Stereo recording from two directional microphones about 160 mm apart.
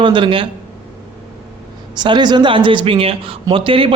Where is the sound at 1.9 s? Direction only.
30° right (ahead or behind).